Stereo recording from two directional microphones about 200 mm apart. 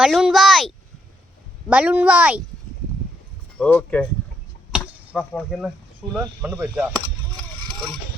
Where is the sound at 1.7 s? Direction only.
10° right (ahead or behind).